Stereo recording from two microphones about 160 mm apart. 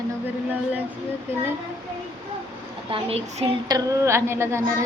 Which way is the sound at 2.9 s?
40° right (ahead or behind).